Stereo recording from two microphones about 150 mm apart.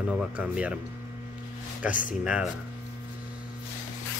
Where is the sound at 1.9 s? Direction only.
60° left (ahead or behind).